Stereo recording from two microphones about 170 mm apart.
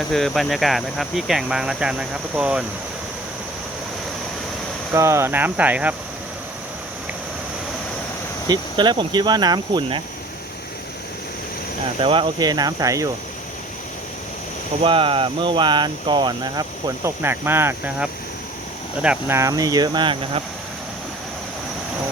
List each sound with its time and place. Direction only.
0.1 s speech: centre (ahead or behind)
4.9 s speech: 15° right (ahead or behind)
8.4 s speech: 25° right (ahead or behind)
11.9 s speech: 30° right (ahead or behind)
14.8 s speech: 30° right (ahead or behind); by 19.4 s 5° right (ahead or behind)
19.4 s speech: 20° right (ahead or behind)